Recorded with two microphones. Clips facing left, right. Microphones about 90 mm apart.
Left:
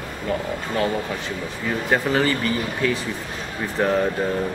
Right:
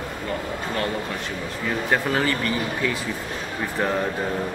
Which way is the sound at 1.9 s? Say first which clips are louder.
Left 3 dB; centre (ahead or behind).